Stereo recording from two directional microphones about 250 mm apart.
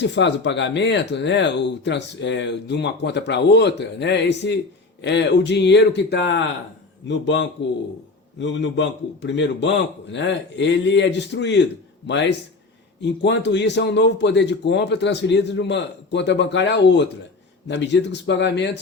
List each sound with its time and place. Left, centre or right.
0.0 s speech: left
13.0 s speech: left